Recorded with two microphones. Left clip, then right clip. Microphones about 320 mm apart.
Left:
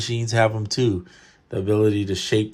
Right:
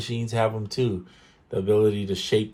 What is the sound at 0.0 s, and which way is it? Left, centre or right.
Speech, left.